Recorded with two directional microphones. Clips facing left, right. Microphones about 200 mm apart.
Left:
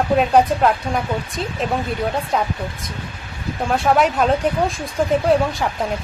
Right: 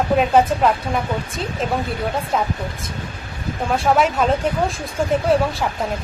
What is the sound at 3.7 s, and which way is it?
A woman's voice, centre (ahead or behind).